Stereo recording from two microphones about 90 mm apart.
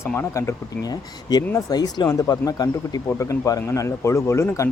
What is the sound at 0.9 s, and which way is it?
Speech, 50° left (ahead or behind).